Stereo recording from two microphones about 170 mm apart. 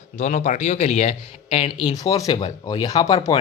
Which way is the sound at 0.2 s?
50° left (ahead or behind).